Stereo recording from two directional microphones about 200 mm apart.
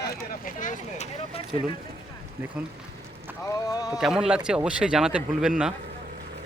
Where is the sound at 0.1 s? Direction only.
40° left (ahead or behind).